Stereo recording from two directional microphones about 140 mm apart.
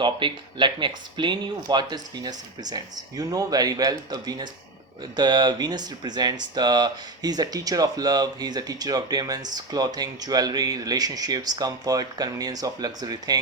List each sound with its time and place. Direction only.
0.0 s speech: 35° right (ahead or behind)